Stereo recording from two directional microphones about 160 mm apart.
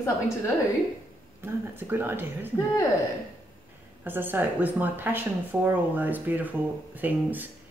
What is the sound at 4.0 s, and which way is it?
Speech, 10° right (ahead or behind).